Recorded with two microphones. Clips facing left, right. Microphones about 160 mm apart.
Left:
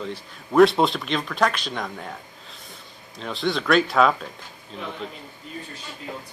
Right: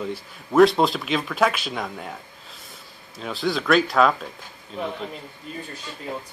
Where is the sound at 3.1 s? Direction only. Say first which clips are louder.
Even; 5° right (ahead or behind).